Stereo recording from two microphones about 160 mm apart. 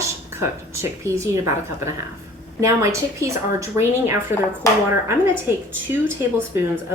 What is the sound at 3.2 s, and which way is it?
Speech, 20° right (ahead or behind).